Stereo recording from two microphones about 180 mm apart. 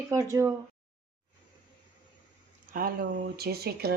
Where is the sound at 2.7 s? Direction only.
55° right (ahead or behind).